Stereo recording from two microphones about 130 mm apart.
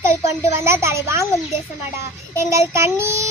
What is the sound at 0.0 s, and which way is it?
A child's voice, 20° right (ahead or behind).